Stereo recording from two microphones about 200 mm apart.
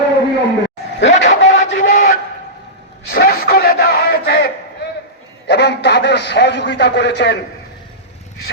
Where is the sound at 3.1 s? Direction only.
50° left (ahead or behind).